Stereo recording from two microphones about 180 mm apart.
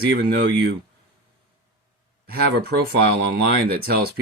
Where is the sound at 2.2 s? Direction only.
60° right (ahead or behind).